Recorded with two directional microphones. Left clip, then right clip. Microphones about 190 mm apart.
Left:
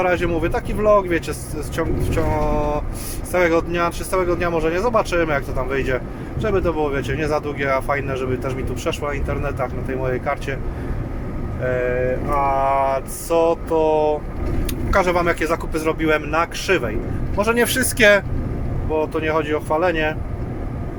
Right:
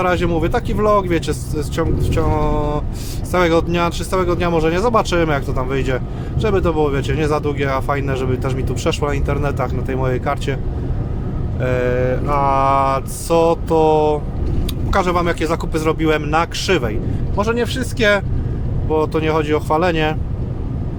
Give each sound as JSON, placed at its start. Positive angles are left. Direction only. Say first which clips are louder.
{"t": 0.0, "sound": "speech", "louder": "right 2 dB", "side_deg": -20}
{"t": 11.6, "sound": "speech", "louder": "right 2 dB", "side_deg": -30}
{"t": 17.3, "sound": "speech", "louder": "even", "side_deg": -10}
{"t": 17.6, "sound": "speech", "louder": "left 3 dB", "side_deg": 0}
{"t": 18.9, "sound": "speech", "louder": "right 3 dB", "side_deg": -25}